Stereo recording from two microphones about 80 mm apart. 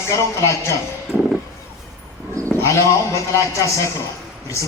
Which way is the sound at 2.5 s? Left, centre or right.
Left.